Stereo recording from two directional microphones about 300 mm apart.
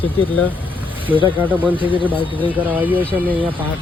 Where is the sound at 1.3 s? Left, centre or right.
Centre.